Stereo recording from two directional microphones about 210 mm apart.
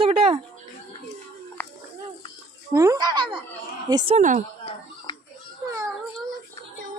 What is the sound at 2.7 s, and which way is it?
Speech, 15° right (ahead or behind).